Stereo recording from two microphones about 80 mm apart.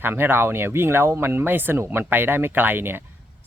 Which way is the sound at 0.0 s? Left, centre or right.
Right.